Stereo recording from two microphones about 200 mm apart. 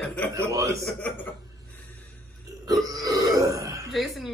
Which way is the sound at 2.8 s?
15° right (ahead or behind).